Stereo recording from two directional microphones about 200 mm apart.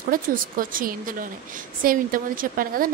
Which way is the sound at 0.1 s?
45° right (ahead or behind).